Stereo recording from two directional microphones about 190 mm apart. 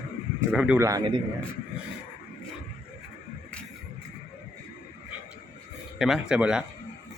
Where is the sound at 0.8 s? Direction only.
20° right (ahead or behind).